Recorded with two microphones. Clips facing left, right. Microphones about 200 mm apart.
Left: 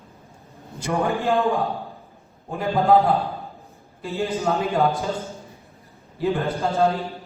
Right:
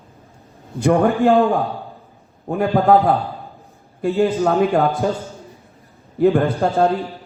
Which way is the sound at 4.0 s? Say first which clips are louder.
Right 9 dB; 60° right (ahead or behind).